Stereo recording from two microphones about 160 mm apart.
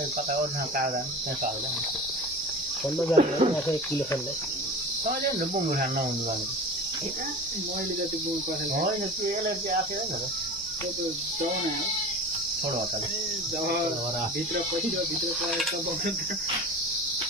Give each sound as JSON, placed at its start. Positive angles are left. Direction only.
{"t": 3.2, "sound": "speech", "side_deg": -45}